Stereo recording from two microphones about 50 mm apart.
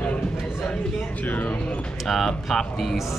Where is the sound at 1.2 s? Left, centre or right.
Left.